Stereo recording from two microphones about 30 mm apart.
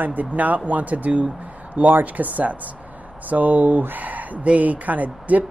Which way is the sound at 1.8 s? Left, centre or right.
Right.